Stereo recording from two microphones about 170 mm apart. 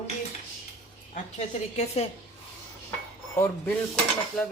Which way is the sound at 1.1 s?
40° left (ahead or behind).